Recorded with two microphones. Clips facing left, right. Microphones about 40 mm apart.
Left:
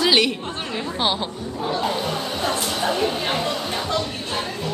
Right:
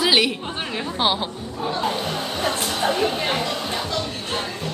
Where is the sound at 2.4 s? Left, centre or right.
Right.